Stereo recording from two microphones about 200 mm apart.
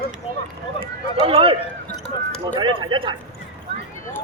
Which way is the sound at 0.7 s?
25° right (ahead or behind).